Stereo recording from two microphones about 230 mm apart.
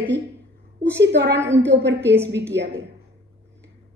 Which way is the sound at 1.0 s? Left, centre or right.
Right.